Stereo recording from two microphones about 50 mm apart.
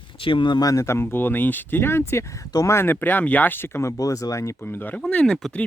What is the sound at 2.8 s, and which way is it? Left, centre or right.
Speech, left.